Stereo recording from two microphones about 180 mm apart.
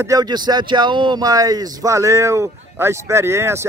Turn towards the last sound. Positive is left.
turn(degrees=-15)  # may be behind; listen again after turning